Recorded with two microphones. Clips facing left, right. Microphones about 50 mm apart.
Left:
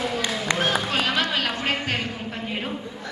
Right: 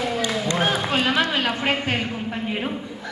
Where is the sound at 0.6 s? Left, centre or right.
Centre.